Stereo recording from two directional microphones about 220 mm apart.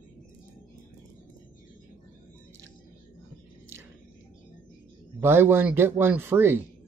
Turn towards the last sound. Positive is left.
turn(degrees=-10)  # may be behind; listen again after turning